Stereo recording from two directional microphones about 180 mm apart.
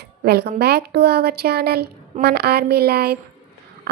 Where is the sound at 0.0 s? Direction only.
65° right (ahead or behind).